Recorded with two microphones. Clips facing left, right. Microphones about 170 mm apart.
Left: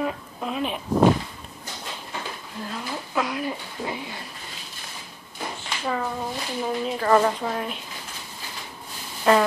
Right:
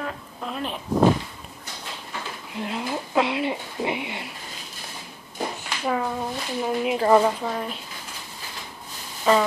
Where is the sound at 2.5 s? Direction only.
20° right (ahead or behind).